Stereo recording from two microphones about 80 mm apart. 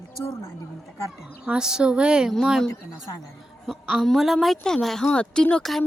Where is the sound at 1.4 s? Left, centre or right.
Centre.